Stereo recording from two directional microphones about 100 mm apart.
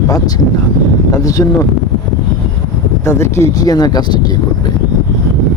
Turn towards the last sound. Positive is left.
turn(degrees=40)  # may be behind; listen again after turning